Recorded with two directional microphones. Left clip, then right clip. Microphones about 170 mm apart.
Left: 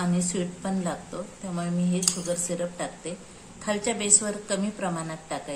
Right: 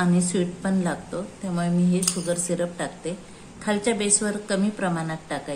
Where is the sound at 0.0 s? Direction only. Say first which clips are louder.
Right 5 dB; 30° right (ahead or behind).